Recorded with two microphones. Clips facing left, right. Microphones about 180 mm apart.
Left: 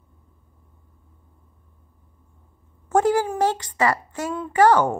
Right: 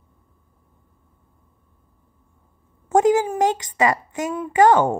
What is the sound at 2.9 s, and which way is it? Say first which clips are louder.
A woman's voice: right 3 dB; 20° right (ahead or behind).